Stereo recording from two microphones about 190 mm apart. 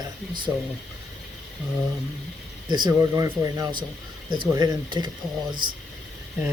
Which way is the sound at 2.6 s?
25° right (ahead or behind).